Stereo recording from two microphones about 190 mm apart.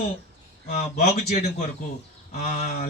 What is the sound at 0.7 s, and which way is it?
Speech, 45° left (ahead or behind).